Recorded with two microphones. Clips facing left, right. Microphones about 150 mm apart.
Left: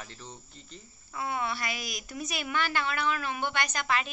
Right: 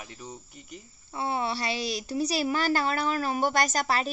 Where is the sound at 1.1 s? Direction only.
30° right (ahead or behind).